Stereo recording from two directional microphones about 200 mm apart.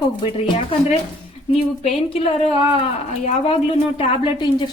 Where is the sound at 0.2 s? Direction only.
25° left (ahead or behind).